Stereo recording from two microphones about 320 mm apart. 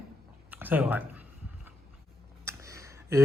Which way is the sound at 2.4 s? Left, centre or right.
Centre.